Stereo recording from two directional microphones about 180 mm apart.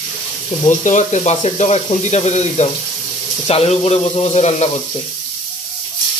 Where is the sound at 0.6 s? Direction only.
45° left (ahead or behind).